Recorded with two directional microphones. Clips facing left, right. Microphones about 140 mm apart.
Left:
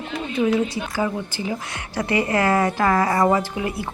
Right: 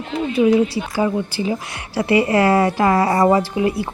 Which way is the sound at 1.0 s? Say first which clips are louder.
Right 6 dB; 20° right (ahead or behind).